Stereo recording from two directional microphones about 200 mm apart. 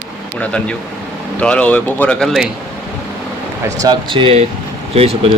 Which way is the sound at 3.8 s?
20° right (ahead or behind).